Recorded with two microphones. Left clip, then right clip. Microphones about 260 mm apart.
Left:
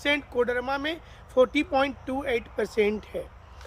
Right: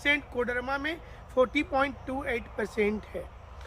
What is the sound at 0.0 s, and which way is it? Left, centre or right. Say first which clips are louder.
Speech: left 2 dB; left.